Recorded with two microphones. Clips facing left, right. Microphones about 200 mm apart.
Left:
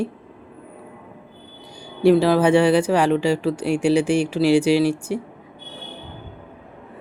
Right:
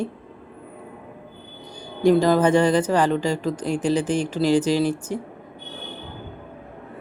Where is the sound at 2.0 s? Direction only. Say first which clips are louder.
Left 2 dB; 5° left (ahead or behind).